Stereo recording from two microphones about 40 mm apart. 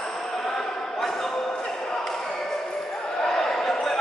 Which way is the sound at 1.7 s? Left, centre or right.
Centre.